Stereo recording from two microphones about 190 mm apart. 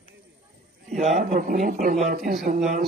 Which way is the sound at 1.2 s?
50° right (ahead or behind).